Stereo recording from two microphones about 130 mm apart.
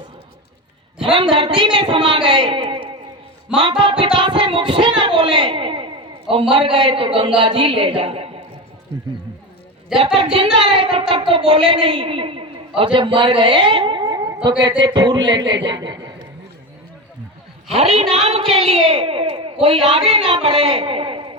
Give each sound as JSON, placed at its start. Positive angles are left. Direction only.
{"t": 1.0, "sound": "a man's voice", "side_deg": -40}
{"t": 4.2, "sound": "a sound", "side_deg": -40}
{"t": 6.5, "sound": "a man's voice", "side_deg": -40}
{"t": 9.9, "sound": "a woman's voice", "side_deg": -5}
{"t": 10.3, "sound": "a man's voice", "side_deg": -40}
{"t": 17.7, "sound": "a woman's voice", "side_deg": -55}